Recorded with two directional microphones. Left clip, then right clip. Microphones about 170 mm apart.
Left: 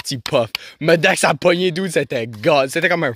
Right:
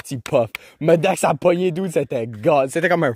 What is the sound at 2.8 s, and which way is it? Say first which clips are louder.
Speech: left 1 dB; 25° right (ahead or behind).